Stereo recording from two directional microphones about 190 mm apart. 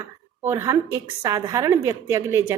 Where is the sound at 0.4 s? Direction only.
15° right (ahead or behind).